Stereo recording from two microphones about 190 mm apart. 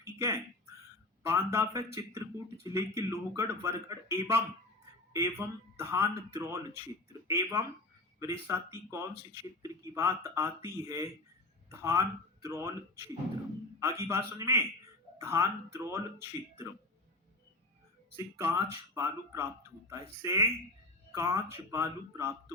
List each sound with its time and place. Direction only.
0.0 s a sound: 15° right (ahead or behind)
1.3 s a man's voice: 15° right (ahead or behind)
13.7 s a man's voice: 15° right (ahead or behind)
18.2 s a man's voice: 15° right (ahead or behind)